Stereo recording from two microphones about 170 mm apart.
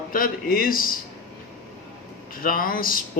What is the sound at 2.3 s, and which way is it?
Speech, 55° left (ahead or behind).